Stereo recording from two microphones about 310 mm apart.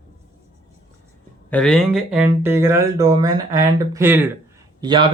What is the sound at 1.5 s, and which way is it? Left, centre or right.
Speech, centre.